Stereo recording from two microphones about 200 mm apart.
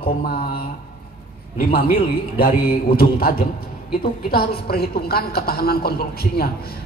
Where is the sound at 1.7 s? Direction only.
50° left (ahead or behind).